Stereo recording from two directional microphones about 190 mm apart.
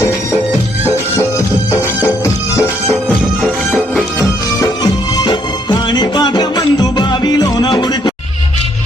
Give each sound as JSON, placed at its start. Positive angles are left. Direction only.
{"t": 3.4, "sound": "music", "side_deg": -5}
{"t": 4.2, "sound": "music", "side_deg": 20}